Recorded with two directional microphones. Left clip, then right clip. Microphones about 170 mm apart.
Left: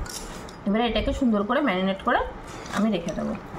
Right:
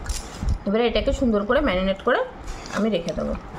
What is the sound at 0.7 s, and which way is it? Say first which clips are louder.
A woman's voice: right 4 dB; 30° right (ahead or behind).